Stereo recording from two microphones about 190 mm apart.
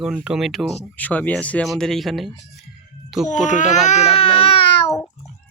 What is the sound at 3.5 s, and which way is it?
Baby cry, 40° left (ahead or behind).